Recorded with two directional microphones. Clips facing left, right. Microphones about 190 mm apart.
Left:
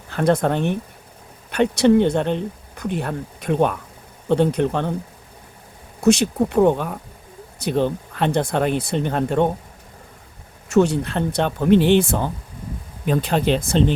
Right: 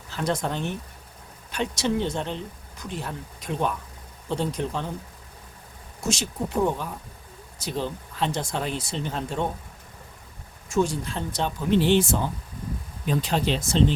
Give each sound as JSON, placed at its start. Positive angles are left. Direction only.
{"t": 0.1, "sound": "speech", "side_deg": 60}
{"t": 6.0, "sound": "speech", "side_deg": 60}
{"t": 10.7, "sound": "speech", "side_deg": 70}